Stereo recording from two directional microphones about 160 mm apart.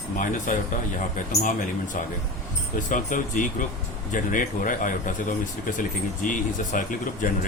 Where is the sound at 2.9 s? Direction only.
55° left (ahead or behind).